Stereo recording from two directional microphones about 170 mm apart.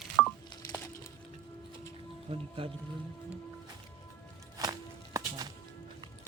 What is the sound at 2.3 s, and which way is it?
Speech, 35° right (ahead or behind).